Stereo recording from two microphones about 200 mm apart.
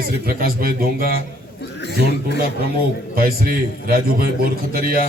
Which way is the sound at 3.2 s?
50° right (ahead or behind).